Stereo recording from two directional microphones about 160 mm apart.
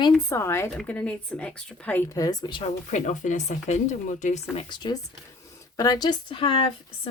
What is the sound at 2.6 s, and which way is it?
Speech, 45° left (ahead or behind).